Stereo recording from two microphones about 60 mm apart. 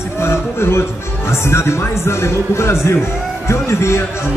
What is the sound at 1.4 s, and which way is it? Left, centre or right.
Speech, left.